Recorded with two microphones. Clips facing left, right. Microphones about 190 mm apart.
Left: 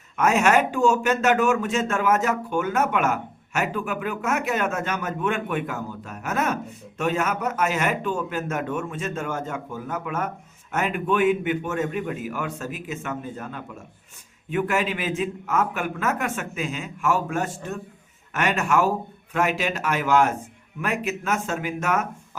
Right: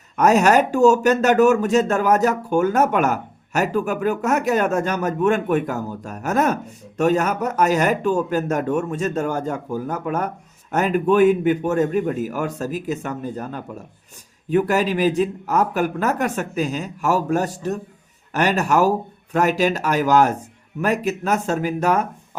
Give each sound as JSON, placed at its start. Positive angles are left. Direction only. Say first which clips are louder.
{"t": 0.2, "sound": "speech", "louder": "right 4 dB", "side_deg": -40}